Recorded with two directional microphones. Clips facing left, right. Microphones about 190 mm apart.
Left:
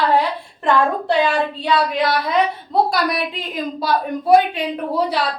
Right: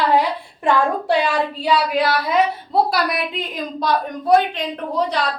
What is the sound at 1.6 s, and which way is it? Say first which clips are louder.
A woman's voice: even; 10° right (ahead or behind).